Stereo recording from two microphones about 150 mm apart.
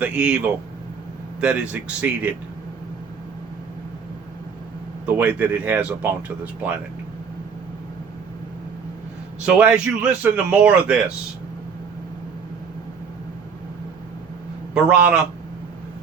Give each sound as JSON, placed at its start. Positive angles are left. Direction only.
{"t": 0.0, "sound": "speech", "side_deg": -5}
{"t": 5.0, "sound": "speech", "side_deg": -10}
{"t": 9.5, "sound": "speech", "side_deg": -5}
{"t": 14.7, "sound": "speech", "side_deg": -5}